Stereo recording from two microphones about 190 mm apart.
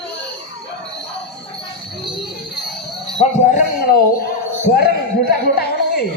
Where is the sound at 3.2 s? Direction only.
45° left (ahead or behind).